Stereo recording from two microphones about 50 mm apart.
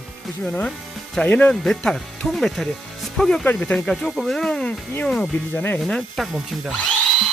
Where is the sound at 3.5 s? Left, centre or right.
Left.